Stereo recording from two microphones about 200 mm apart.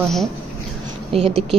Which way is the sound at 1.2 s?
30° right (ahead or behind).